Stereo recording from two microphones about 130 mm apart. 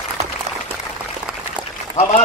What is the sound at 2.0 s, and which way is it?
Speech, 65° left (ahead or behind).